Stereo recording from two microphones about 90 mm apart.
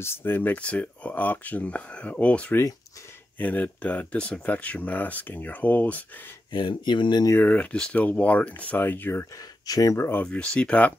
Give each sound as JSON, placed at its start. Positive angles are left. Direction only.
{"t": 0.0, "sound": "speech", "side_deg": 25}
{"t": 6.5, "sound": "speech", "side_deg": 60}
{"t": 7.3, "sound": "speech", "side_deg": 15}
{"t": 9.4, "sound": "speech", "side_deg": 40}
{"t": 9.9, "sound": "speech", "side_deg": 25}
{"t": 10.2, "sound": "speech", "side_deg": 15}